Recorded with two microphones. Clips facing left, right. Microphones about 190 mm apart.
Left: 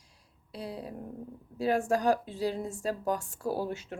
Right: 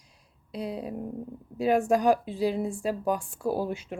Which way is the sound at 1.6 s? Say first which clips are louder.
Right 4 dB; 15° right (ahead or behind).